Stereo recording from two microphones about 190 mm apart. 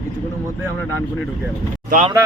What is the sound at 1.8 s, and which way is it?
Speech, 40° right (ahead or behind).